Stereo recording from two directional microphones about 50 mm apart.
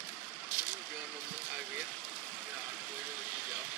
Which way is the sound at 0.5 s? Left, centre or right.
Right.